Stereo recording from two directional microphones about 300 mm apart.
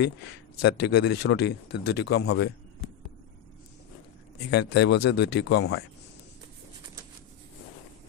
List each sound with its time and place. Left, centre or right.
0.6 s a man's voice: left
4.5 s a man's voice: left